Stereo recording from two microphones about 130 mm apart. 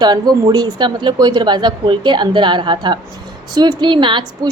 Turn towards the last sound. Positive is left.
turn(degrees=-40)  # may be behind; listen again after turning